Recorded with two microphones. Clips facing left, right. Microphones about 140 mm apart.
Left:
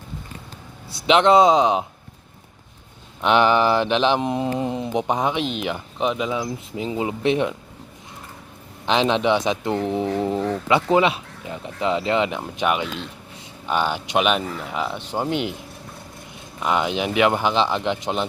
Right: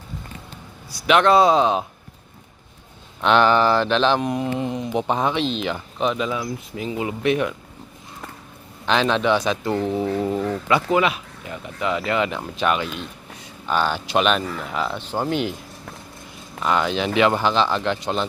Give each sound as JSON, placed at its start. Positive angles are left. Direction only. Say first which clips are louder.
{"t": 0.9, "sound": "speech", "louder": "left 1 dB", "side_deg": 25}
{"t": 3.2, "sound": "speech", "louder": "right 1 dB", "side_deg": 15}
{"t": 4.9, "sound": "speech", "louder": "right 1 dB", "side_deg": 15}
{"t": 8.9, "sound": "speech", "louder": "even", "side_deg": 20}
{"t": 16.6, "sound": "speech", "louder": "right 1 dB", "side_deg": 15}